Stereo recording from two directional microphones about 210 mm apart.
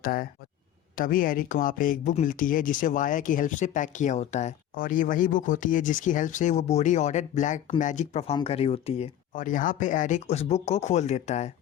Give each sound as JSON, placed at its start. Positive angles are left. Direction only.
{"t": 0.0, "sound": "speech", "side_deg": 40}